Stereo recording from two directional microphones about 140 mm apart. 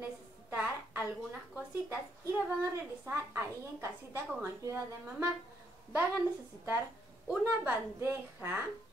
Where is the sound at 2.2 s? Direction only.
20° right (ahead or behind).